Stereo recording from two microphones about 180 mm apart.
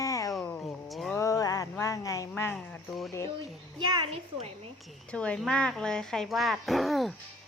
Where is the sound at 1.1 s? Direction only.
15° left (ahead or behind).